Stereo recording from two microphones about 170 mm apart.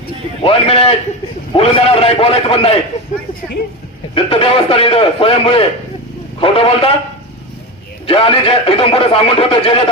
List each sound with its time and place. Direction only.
0.4 s speech: 35° left (ahead or behind)
4.1 s speech: 35° left (ahead or behind)
8.0 s speech: 35° left (ahead or behind)